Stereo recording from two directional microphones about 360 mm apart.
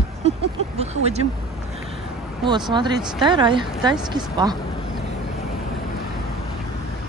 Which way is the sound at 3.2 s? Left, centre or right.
Centre.